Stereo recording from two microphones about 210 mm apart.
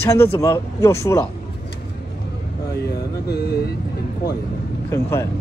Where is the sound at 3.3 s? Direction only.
50° left (ahead or behind).